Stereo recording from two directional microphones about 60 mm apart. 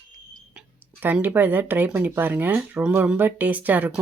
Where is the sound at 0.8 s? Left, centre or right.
Right.